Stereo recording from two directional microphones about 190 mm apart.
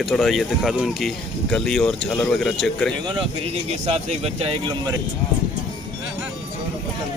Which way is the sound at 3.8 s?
35° right (ahead or behind).